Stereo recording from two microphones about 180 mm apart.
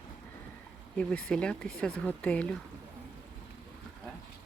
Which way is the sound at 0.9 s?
5° left (ahead or behind).